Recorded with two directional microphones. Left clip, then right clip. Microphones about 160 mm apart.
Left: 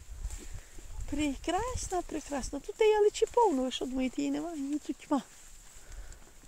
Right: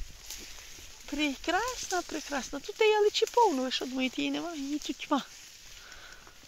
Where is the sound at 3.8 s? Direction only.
20° left (ahead or behind).